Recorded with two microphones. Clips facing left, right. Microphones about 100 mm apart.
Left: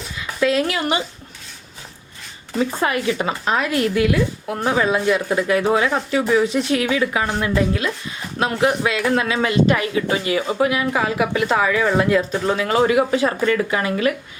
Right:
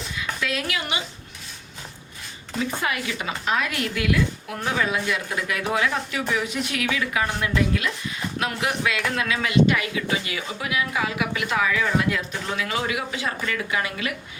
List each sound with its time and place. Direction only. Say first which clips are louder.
0.2 s a woman's voice: left 10 dB; 30° left (ahead or behind)
2.6 s a man's voice: left 6 dB; 35° left (ahead or behind)